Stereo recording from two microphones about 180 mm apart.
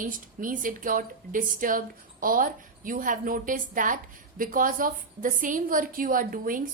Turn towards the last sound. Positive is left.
turn(degrees=-50)  # may be behind; listen again after turning